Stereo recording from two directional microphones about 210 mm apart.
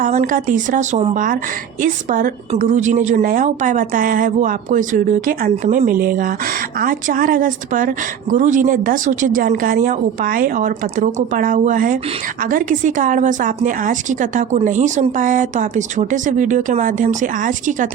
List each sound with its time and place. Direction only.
0.0 s a woman's voice: 35° right (ahead or behind)